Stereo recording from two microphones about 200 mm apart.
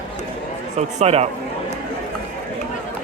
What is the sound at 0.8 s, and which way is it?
Speech, 30° right (ahead or behind).